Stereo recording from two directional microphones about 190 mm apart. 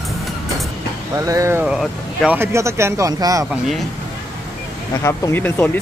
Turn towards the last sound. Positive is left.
turn(degrees=10)  # may be behind; listen again after turning